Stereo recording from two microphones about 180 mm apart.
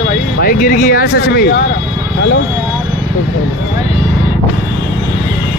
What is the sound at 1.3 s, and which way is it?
Speech, 65° left (ahead or behind).